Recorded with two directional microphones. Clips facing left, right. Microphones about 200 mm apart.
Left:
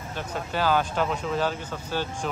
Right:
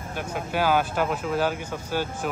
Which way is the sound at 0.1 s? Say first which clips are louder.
Right 2 dB; 10° right (ahead or behind).